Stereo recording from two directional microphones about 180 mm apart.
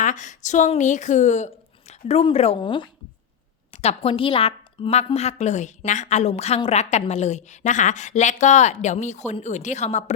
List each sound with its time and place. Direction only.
0.0 s a woman's voice: 45° left (ahead or behind)